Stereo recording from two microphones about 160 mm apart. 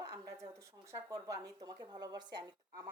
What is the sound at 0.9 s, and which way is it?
A woman's voice, 20° right (ahead or behind).